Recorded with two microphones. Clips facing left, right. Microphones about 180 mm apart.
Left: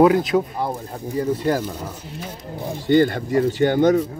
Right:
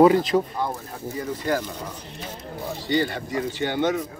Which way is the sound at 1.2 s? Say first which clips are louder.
Left 5 dB; 30° left (ahead or behind).